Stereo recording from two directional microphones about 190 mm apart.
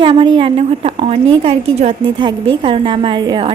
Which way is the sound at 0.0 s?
30° right (ahead or behind).